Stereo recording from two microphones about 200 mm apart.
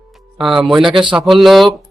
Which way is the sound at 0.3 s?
Centre (ahead or behind).